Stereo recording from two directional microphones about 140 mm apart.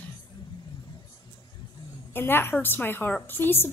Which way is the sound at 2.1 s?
15° left (ahead or behind).